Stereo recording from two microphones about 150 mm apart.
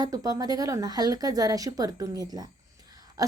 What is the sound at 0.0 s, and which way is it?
A woman's voice, 25° right (ahead or behind).